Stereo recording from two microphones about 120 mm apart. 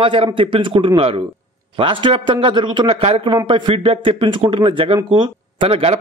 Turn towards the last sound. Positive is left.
turn(degrees=-50)  # may be behind; listen again after turning